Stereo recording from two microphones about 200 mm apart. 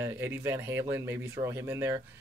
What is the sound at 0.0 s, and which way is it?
Speech, 10° right (ahead or behind).